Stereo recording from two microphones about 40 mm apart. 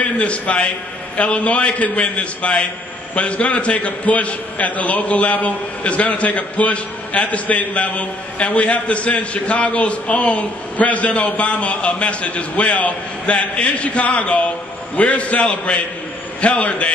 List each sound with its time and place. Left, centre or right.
0.0 s a man's voice: left